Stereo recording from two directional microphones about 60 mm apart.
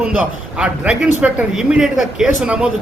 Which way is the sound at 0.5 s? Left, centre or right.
Centre.